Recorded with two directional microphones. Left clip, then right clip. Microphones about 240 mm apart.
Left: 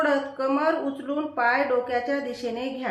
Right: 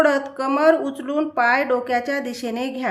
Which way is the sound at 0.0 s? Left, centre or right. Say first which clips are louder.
Right 5 dB; right.